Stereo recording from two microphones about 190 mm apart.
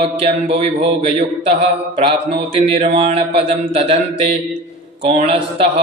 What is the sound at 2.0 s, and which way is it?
A man's voice, 25° right (ahead or behind).